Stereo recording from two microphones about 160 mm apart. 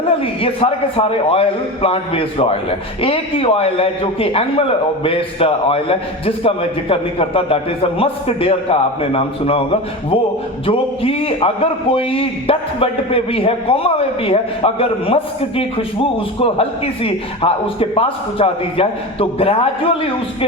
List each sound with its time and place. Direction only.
0.2 s a man's voice: 35° left (ahead or behind)
10.7 s a man's voice: 35° left (ahead or behind)